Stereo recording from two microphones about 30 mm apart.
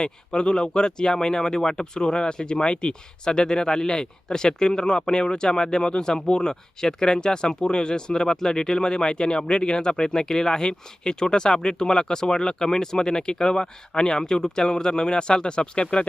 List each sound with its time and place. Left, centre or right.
0.0 s speech: left